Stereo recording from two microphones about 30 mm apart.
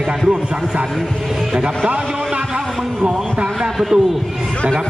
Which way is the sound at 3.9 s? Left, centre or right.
Right.